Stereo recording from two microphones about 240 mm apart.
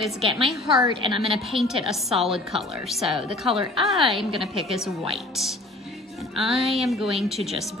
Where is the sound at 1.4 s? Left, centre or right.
Centre.